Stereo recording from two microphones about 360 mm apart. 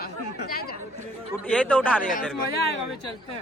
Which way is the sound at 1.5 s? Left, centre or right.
Centre.